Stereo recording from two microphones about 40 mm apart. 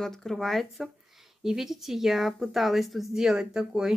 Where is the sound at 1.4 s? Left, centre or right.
Centre.